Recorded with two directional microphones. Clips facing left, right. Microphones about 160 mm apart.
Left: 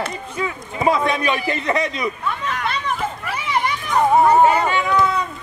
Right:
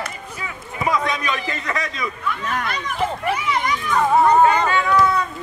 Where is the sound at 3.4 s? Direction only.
30° left (ahead or behind).